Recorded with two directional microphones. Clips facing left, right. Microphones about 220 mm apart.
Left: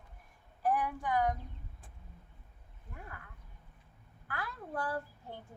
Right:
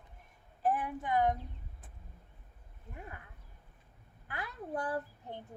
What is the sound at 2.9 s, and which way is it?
Speech, 20° right (ahead or behind).